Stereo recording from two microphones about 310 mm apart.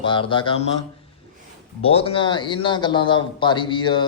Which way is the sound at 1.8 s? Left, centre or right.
Centre.